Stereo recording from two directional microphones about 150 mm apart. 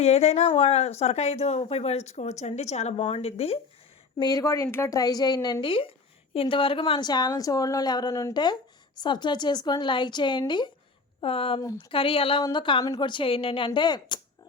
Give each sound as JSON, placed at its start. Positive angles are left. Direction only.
{"t": 0.0, "sound": "speech", "side_deg": 45}
{"t": 4.2, "sound": "a woman's voice", "side_deg": 25}